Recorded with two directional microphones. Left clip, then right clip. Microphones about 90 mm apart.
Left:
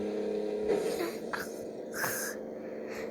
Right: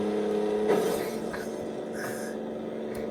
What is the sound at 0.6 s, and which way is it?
Vehicle, 45° left (ahead or behind).